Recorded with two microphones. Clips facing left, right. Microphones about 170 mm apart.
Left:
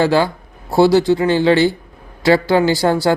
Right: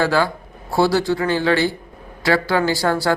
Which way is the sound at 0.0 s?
25° left (ahead or behind).